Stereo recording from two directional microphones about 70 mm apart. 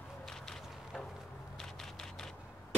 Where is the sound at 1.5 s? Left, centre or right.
Centre.